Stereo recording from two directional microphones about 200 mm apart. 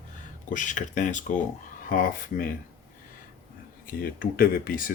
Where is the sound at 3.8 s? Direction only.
45° left (ahead or behind).